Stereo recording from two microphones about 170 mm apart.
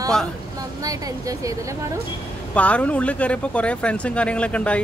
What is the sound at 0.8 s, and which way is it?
Speech, 20° right (ahead or behind).